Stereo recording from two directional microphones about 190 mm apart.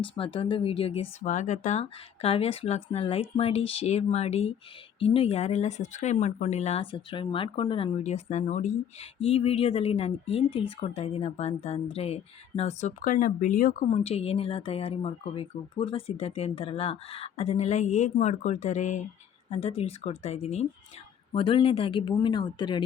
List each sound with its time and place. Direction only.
0.0 s speech: 25° left (ahead or behind)
1.2 s speech: 40° left (ahead or behind)
13.9 s speech: 35° left (ahead or behind)